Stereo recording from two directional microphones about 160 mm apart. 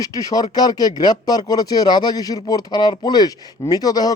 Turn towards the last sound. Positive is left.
turn(degrees=25)  # may be behind; listen again after turning